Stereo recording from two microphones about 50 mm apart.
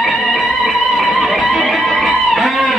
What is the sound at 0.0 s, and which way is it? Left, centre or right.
Music, centre.